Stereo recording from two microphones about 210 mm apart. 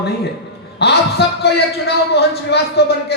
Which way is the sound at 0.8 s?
50° left (ahead or behind).